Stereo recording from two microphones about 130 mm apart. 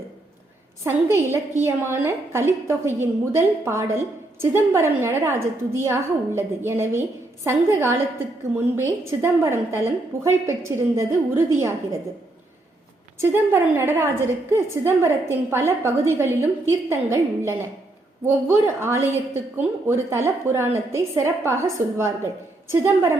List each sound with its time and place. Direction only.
0.9 s a woman's voice: 20° right (ahead or behind)
13.1 s a woman's voice: 15° right (ahead or behind)